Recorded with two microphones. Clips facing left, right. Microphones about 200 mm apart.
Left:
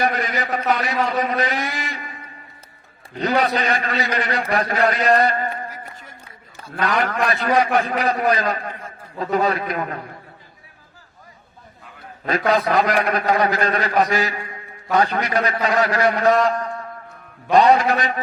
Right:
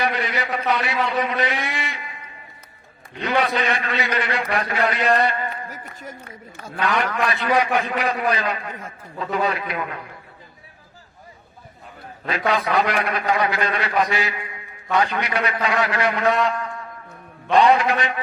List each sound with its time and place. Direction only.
0.0 s a man's voice: 45° left (ahead or behind)
5.2 s a sound: 40° left (ahead or behind)
6.7 s a man's voice: 40° left (ahead or behind)
12.5 s a man's voice: 40° left (ahead or behind)